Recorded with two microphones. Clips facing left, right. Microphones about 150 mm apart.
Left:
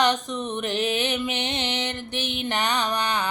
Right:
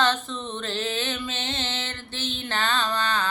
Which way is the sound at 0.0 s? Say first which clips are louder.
Left 2 dB; 15° left (ahead or behind).